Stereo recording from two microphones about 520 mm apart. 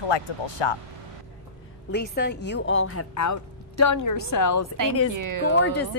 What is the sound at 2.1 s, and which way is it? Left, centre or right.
A woman's voice, centre.